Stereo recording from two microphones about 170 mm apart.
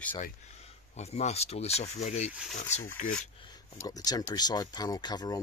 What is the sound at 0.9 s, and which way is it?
Speech, 40° left (ahead or behind).